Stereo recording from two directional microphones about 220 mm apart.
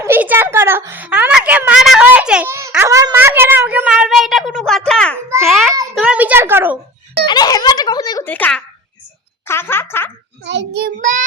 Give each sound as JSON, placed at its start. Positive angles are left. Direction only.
{"t": 0.0, "sound": "a child's voice", "side_deg": -10}
{"t": 7.3, "sound": "speech", "side_deg": 20}
{"t": 10.4, "sound": "a child's voice", "side_deg": -55}